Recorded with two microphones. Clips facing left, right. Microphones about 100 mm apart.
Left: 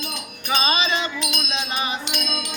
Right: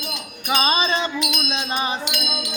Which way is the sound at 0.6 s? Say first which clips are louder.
Right 2 dB; 30° right (ahead or behind).